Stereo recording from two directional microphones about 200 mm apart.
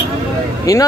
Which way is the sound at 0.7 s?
15° left (ahead or behind).